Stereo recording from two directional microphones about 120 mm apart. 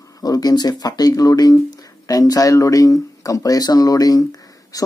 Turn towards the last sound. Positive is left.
turn(degrees=30)  # may be behind; listen again after turning